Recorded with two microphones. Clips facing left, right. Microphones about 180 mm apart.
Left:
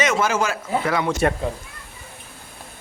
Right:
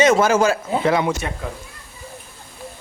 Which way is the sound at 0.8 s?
25° right (ahead or behind).